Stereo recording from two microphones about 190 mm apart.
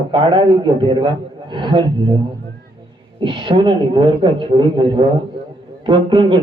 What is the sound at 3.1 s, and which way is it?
A man's voice, 25° right (ahead or behind).